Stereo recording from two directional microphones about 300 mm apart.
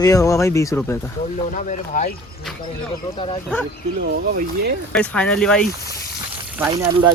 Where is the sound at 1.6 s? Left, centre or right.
Left.